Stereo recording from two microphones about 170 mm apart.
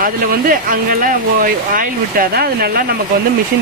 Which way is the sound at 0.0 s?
55° right (ahead or behind).